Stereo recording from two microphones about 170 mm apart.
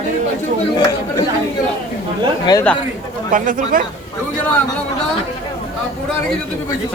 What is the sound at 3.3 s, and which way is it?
Speech, 55° right (ahead or behind).